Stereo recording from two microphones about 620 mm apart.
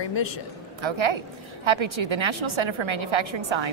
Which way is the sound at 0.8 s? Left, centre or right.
Right.